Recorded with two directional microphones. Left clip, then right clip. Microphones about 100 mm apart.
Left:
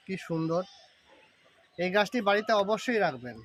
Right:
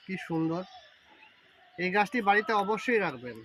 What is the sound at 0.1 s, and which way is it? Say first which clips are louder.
Speech: left 1 dB; 90° left.